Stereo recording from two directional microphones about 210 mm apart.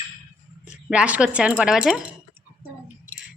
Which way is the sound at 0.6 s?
5° right (ahead or behind).